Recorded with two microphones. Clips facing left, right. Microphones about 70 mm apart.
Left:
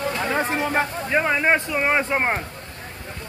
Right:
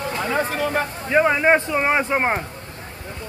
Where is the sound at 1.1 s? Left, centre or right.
Centre.